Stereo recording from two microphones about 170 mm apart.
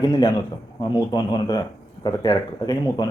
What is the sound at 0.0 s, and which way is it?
Speech, 25° left (ahead or behind).